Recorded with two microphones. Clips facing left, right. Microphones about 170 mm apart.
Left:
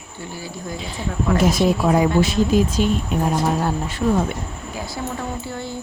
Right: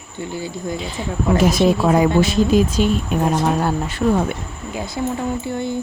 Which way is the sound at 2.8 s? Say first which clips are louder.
Right 2 dB; 80° right.